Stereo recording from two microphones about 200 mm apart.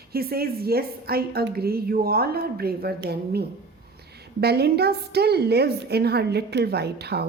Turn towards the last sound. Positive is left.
turn(degrees=-55)  # may be behind; listen again after turning